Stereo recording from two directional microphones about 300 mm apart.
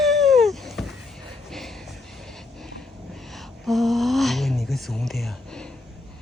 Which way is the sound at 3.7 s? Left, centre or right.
Centre.